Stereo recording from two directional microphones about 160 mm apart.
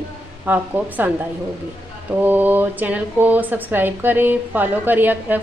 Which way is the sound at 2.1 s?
10° right (ahead or behind).